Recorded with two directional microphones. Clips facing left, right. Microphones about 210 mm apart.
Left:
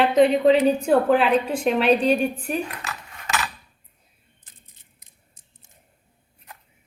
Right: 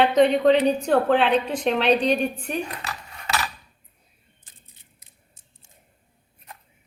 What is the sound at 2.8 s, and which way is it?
Cutlery, 35° right (ahead or behind).